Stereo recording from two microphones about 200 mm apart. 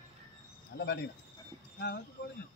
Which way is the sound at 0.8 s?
55° left (ahead or behind).